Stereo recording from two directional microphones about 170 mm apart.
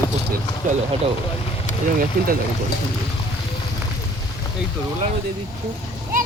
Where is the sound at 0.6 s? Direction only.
45° right (ahead or behind).